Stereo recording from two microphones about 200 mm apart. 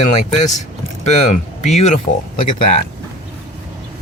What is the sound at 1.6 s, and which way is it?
Speech, 35° left (ahead or behind).